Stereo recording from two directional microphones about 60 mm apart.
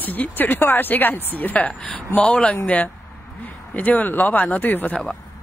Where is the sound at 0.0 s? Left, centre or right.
Left.